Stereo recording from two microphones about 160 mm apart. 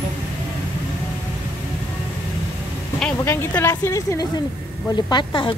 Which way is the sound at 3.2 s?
15° left (ahead or behind).